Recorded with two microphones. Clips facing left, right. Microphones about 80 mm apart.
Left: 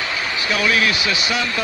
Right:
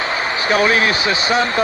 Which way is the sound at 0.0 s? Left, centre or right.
Right.